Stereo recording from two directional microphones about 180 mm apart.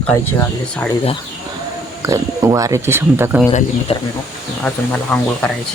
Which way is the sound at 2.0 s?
15° right (ahead or behind).